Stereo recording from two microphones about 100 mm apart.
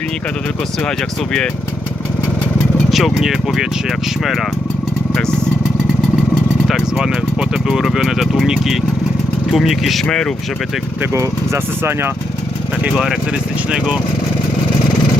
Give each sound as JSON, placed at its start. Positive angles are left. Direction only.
{"t": 0.9, "sound": "speech", "side_deg": 5}
{"t": 2.9, "sound": "speech", "side_deg": -5}
{"t": 5.1, "sound": "vehicle", "side_deg": 5}
{"t": 6.3, "sound": "speech", "side_deg": 0}
{"t": 11.0, "sound": "speech", "side_deg": -30}
{"t": 13.0, "sound": "speech", "side_deg": -10}